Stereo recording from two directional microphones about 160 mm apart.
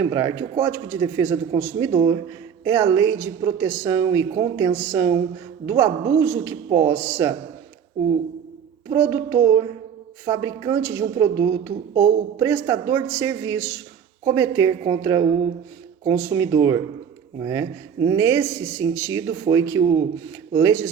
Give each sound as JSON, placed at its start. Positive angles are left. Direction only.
{"t": 0.0, "sound": "a woman's voice", "side_deg": -20}
{"t": 8.9, "sound": "a woman's voice", "side_deg": -15}